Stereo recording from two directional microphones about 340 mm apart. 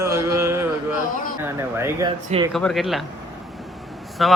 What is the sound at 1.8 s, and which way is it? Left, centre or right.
Mantra, centre.